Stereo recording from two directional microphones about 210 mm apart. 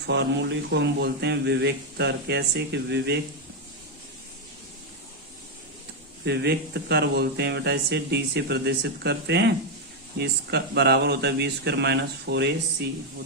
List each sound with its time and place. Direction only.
0.0 s speech: 55° right (ahead or behind)
6.2 s speech: 50° right (ahead or behind)